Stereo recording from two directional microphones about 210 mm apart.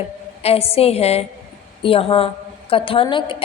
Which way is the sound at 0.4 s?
30° left (ahead or behind).